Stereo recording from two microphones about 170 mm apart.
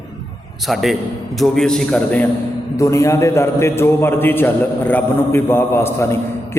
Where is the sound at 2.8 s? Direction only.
15° left (ahead or behind).